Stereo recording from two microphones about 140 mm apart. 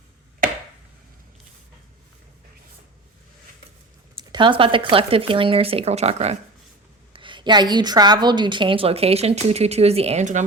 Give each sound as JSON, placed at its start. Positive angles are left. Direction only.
{"t": 4.2, "sound": "a woman's voice", "side_deg": -35}
{"t": 7.1, "sound": "a woman's voice", "side_deg": -35}